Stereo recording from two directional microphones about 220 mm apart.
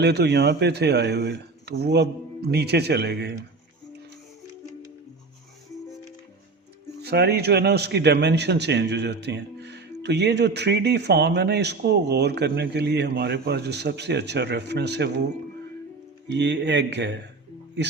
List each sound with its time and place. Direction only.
0.0 s a man's voice: 50° right (ahead or behind)
7.0 s a man's voice: 45° right (ahead or behind)
16.3 s a man's voice: 55° right (ahead or behind)